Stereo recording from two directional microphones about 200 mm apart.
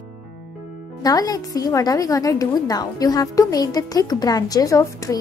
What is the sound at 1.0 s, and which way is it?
A woman's voice, 20° left (ahead or behind).